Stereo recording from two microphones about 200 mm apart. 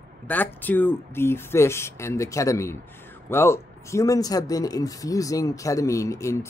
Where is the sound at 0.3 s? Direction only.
10° left (ahead or behind).